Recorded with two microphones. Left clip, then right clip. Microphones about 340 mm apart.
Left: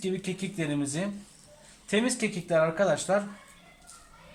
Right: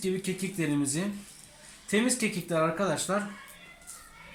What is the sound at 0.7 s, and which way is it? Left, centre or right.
Speech, left.